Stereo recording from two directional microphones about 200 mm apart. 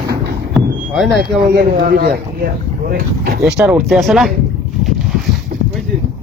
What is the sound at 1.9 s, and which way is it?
Speech, 50° right (ahead or behind).